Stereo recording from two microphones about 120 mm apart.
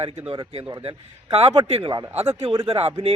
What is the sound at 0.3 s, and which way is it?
Speech, 50° right (ahead or behind).